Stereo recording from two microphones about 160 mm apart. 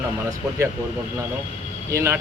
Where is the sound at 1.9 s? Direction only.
15° right (ahead or behind).